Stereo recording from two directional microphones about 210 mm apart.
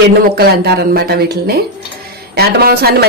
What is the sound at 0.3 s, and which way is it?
Speech, 50° right (ahead or behind).